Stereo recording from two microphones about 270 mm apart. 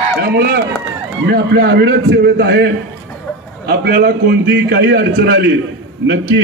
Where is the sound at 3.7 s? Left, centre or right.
Right.